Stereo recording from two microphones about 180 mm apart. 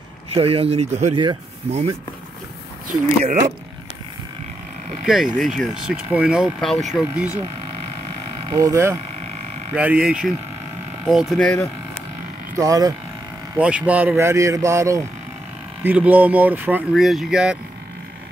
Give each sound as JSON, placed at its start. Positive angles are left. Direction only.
{"t": 0.3, "sound": "speech", "side_deg": -30}
{"t": 1.1, "sound": "speech", "side_deg": -25}
{"t": 2.9, "sound": "speech", "side_deg": -50}
{"t": 5.4, "sound": "speech", "side_deg": 0}
{"t": 8.5, "sound": "speech", "side_deg": -20}
{"t": 12.5, "sound": "speech", "side_deg": -20}
{"t": 13.6, "sound": "speech", "side_deg": -5}